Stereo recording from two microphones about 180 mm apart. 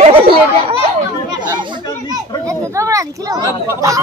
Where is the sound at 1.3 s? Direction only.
25° right (ahead or behind).